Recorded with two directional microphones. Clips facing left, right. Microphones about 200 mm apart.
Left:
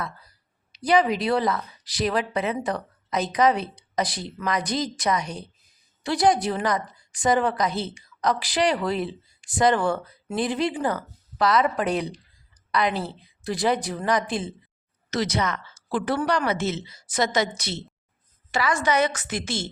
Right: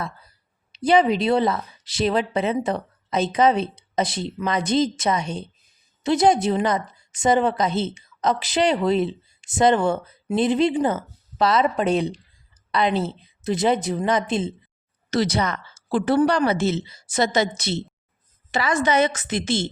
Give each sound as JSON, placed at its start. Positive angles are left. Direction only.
{"t": 0.7, "sound": "a woman's voice", "side_deg": -25}